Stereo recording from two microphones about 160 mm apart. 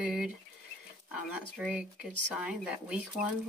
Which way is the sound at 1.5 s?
5° right (ahead or behind).